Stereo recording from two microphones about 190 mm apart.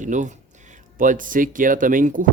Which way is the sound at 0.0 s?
40° right (ahead or behind).